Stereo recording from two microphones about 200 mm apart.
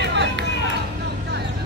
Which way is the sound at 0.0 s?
60° right (ahead or behind).